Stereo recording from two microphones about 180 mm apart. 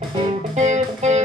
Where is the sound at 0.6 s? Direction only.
40° right (ahead or behind).